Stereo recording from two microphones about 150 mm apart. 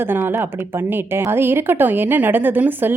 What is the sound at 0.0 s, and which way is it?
A woman's voice, 15° right (ahead or behind).